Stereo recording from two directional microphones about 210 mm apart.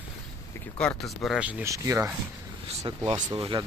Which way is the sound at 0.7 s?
5° left (ahead or behind).